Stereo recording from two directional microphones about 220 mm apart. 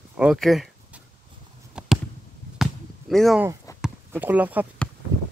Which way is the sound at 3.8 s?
5° right (ahead or behind).